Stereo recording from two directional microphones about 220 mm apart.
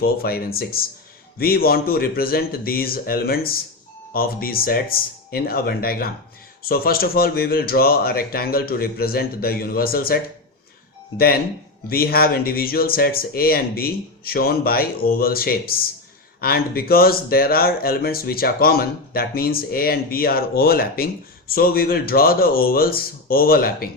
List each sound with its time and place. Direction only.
0.0 s speech: 45° left (ahead or behind)
11.9 s speech: 45° left (ahead or behind)